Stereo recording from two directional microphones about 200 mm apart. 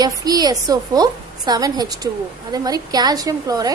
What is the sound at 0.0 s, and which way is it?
A woman's voice, 20° right (ahead or behind).